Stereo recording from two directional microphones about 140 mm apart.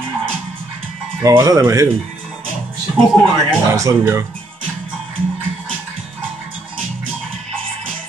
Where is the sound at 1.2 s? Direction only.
20° right (ahead or behind).